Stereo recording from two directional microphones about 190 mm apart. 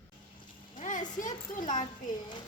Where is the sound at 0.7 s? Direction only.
40° left (ahead or behind).